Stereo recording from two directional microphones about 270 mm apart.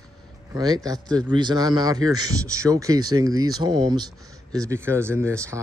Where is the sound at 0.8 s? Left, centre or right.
Centre.